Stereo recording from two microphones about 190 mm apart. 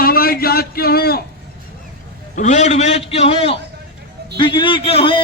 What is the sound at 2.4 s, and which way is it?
A man's voice, 40° left (ahead or behind).